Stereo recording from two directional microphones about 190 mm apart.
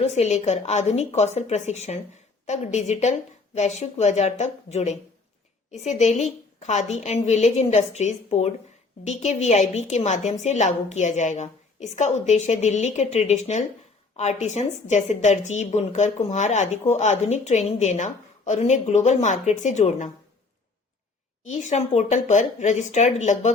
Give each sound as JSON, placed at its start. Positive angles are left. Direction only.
{"t": 0.0, "sound": "a woman's voice", "side_deg": 35}
{"t": 21.4, "sound": "a woman's voice", "side_deg": 40}